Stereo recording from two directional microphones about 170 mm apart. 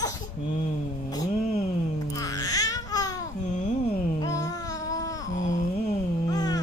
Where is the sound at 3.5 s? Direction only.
45° left (ahead or behind).